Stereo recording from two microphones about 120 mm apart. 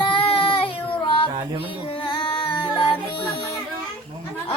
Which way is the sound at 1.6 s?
50° left (ahead or behind).